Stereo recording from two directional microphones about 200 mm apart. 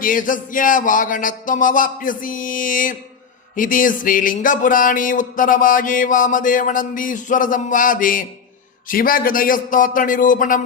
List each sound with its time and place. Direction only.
0.0 s music: 45° left (ahead or behind)